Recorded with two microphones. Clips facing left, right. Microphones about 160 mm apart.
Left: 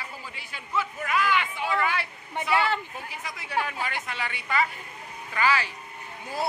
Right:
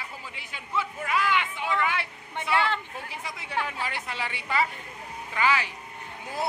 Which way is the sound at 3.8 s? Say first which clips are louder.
Left 1 dB; 30° right (ahead or behind).